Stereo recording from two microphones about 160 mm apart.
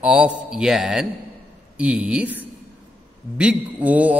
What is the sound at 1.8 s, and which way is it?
Mantra, 10° right (ahead or behind).